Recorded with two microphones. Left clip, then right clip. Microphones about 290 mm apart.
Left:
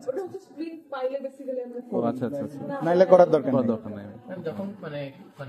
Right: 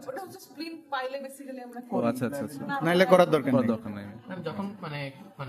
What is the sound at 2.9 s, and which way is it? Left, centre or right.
Speech, right.